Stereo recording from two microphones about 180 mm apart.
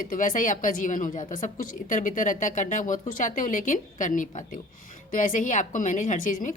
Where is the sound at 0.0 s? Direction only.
50° left (ahead or behind).